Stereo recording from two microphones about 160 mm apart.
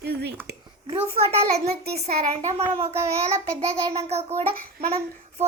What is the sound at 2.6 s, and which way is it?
Speech, 40° right (ahead or behind).